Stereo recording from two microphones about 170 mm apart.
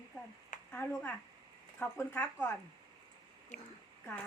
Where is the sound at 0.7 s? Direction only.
10° left (ahead or behind).